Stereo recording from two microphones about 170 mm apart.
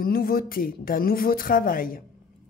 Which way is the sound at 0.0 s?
60° left (ahead or behind).